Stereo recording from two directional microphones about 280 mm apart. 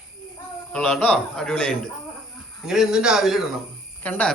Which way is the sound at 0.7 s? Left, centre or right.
Centre.